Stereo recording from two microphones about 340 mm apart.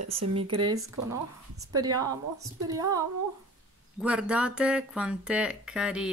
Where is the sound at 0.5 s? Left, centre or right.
Centre.